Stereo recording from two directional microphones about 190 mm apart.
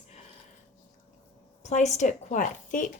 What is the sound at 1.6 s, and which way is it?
Speech, 35° left (ahead or behind).